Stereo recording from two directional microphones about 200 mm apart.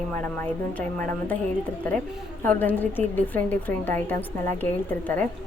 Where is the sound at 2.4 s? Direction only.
10° left (ahead or behind).